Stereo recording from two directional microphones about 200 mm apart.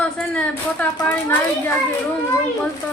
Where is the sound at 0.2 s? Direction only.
5° left (ahead or behind).